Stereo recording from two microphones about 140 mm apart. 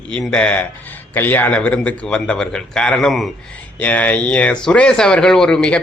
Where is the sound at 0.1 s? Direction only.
5° left (ahead or behind).